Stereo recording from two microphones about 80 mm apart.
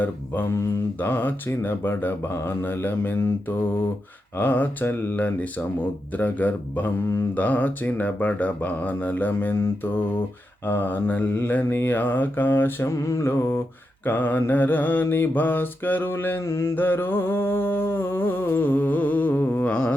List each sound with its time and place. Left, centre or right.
1.0 s mantra: left
12.9 s mantra: left
19.7 s music: centre